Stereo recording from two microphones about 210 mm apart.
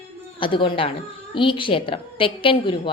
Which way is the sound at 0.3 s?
25° left (ahead or behind).